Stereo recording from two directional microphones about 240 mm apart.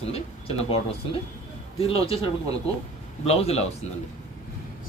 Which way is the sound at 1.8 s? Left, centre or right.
Left.